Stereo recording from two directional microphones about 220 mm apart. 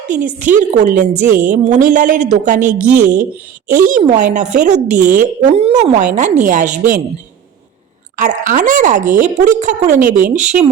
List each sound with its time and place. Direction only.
0.1 s a woman's voice: 35° right (ahead or behind)
8.1 s a woman's voice: 35° right (ahead or behind)